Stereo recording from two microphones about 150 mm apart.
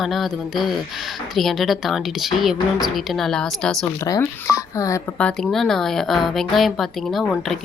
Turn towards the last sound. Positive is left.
turn(degrees=0)  # may be behind; listen again after turning